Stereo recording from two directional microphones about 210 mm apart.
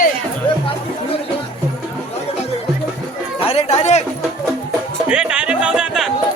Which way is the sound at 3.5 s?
30° left (ahead or behind).